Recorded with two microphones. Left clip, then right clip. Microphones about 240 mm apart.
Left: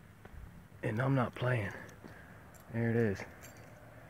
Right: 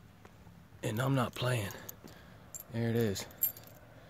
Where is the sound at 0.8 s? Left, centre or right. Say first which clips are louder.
Even; centre.